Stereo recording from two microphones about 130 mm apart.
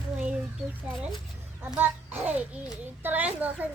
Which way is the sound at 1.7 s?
15° right (ahead or behind).